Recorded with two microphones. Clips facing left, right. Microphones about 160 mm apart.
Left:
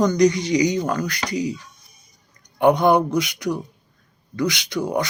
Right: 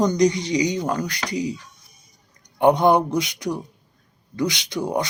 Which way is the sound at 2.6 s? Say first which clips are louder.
Even; 25° right (ahead or behind).